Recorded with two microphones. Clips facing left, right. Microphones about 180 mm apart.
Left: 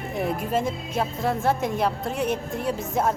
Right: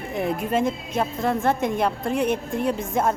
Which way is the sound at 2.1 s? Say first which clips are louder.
Right 3 dB; 55° right (ahead or behind).